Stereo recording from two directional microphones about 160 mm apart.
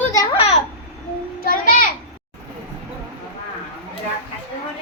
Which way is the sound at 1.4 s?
60° left (ahead or behind).